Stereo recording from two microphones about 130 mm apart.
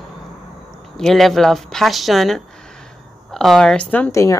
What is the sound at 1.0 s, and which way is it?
Speech, centre (ahead or behind).